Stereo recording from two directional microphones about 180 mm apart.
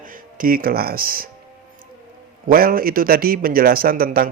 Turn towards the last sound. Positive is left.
turn(degrees=-55)  # may be behind; listen again after turning